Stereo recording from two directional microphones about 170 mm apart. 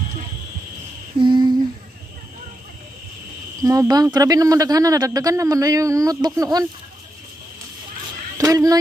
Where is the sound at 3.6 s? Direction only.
20° right (ahead or behind).